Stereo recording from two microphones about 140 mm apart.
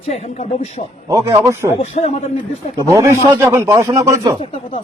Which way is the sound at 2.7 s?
20° right (ahead or behind).